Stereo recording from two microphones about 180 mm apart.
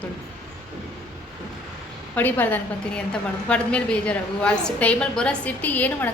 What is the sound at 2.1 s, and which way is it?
A woman's voice, 10° left (ahead or behind).